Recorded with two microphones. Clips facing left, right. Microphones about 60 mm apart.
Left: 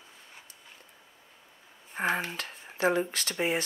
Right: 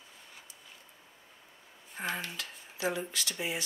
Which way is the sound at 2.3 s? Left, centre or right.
Left.